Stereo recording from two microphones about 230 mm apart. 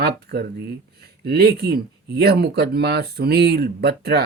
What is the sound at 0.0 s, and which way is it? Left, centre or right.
Speech, right.